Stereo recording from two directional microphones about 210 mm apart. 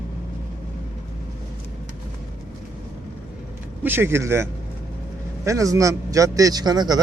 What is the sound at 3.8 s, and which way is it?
Speech, 10° right (ahead or behind).